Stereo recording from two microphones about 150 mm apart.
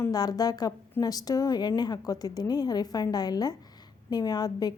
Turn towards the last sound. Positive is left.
turn(degrees=25)  # may be behind; listen again after turning